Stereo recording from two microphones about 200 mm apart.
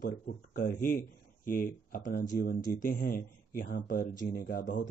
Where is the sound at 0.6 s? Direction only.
45° left (ahead or behind).